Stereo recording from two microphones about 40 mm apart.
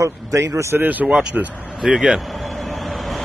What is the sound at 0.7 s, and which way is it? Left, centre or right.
Speech, right.